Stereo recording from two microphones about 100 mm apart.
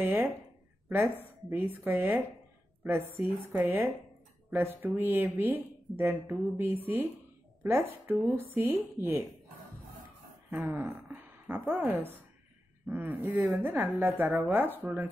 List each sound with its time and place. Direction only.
0.0 s a woman's voice: 20° right (ahead or behind)
10.5 s a woman's voice: 20° right (ahead or behind)